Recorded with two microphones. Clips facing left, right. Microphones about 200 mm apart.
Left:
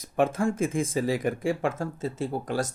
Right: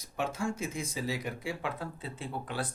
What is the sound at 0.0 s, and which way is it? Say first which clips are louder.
Speech: left 9 dB; 50° left (ahead or behind).